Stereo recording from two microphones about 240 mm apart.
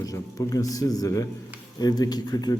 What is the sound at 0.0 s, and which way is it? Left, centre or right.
A man's voice, centre.